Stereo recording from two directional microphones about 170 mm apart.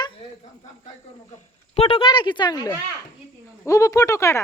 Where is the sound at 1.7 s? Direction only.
35° left (ahead or behind).